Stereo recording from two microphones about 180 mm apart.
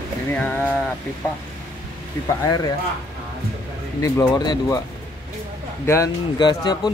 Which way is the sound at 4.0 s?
20° left (ahead or behind).